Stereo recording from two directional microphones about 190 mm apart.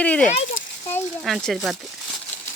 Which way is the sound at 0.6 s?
90° left.